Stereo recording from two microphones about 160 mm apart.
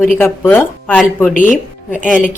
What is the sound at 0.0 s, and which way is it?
Speech, 10° left (ahead or behind).